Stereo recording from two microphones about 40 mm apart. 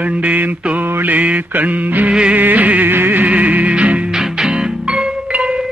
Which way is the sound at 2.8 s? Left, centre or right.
Right.